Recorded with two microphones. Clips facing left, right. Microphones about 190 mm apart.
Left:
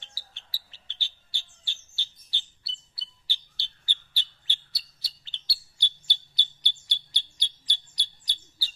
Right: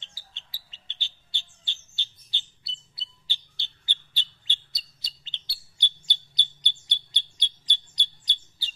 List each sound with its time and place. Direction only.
0.0 s bird: 20° right (ahead or behind)